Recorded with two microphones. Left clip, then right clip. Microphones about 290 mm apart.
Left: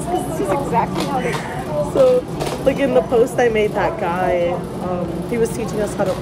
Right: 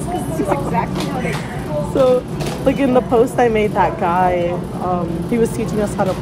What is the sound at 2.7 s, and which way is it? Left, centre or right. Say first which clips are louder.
A woman's voice: right 1 dB; centre.